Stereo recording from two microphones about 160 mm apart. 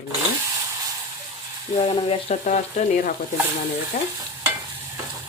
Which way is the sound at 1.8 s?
35° left (ahead or behind).